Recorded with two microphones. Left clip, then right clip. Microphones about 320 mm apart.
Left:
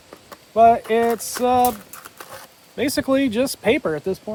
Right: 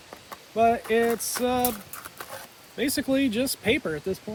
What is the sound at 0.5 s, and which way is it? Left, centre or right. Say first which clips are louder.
Speech: left 8 dB; centre.